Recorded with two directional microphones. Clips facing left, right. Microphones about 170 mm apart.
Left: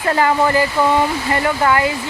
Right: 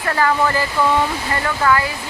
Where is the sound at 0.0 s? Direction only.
20° left (ahead or behind).